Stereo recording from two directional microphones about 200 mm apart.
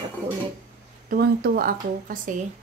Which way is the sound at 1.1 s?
50° right (ahead or behind).